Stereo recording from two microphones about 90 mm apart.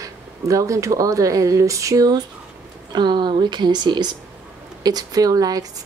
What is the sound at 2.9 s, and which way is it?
A woman's voice, 55° right (ahead or behind).